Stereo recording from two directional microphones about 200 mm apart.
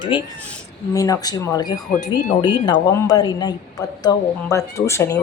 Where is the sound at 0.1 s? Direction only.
25° left (ahead or behind).